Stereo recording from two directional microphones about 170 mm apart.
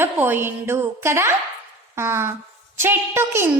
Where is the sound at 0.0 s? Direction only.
10° right (ahead or behind).